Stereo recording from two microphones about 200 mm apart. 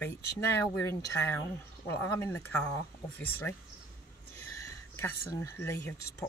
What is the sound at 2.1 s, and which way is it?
Speech, 15° left (ahead or behind).